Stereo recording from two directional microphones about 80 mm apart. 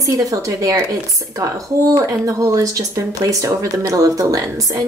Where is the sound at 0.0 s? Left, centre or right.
Right.